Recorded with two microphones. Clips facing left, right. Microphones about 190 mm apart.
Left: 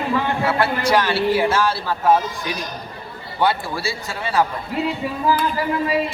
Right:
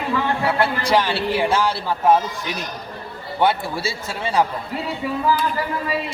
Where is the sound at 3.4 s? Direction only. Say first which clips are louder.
Right 1 dB; 20° right (ahead or behind).